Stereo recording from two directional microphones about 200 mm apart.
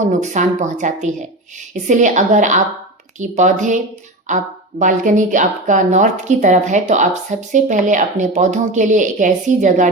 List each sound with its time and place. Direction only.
0.0 s speech: 35° right (ahead or behind)